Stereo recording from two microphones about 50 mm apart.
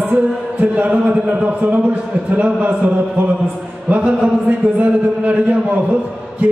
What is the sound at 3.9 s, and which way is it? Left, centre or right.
Speech, right.